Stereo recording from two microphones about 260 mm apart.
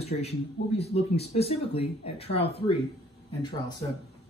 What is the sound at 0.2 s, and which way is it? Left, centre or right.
Speech, left.